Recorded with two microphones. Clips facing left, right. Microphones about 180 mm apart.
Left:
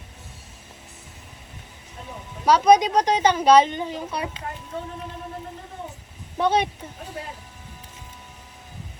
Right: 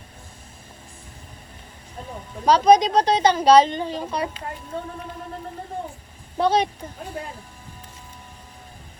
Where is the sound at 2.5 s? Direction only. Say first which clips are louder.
Right 1 dB; 10° left (ahead or behind).